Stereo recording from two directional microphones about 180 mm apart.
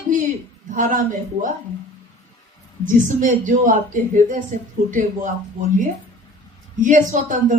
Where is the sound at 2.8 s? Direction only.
45° right (ahead or behind).